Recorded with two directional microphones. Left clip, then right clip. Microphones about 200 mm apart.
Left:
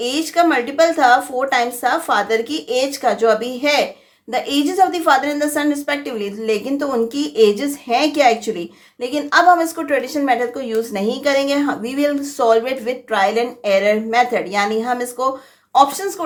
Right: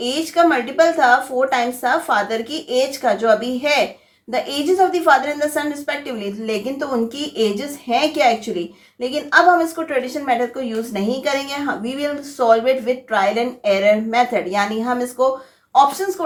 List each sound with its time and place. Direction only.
0.0 s a woman's voice: 30° left (ahead or behind)